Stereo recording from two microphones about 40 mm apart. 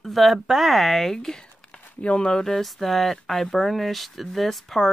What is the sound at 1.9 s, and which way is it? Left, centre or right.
Speech, left.